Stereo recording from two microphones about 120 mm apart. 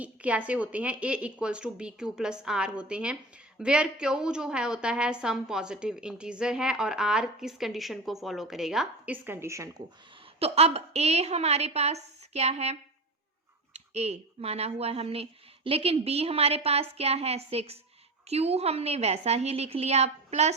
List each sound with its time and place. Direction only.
0.0 s a woman's voice: 10° right (ahead or behind)
9.1 s speech: 15° right (ahead or behind)
10.4 s speech: 55° right (ahead or behind)
13.7 s speech: 65° right (ahead or behind)